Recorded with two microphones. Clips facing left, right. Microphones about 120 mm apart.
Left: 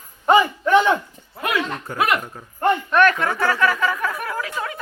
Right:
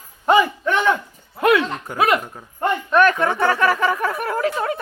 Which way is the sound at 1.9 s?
15° right (ahead or behind).